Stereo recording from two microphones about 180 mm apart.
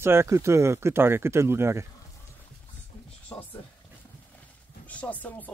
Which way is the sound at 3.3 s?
15° left (ahead or behind).